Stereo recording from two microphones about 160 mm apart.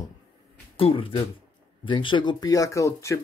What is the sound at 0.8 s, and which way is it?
Speech, 35° left (ahead or behind).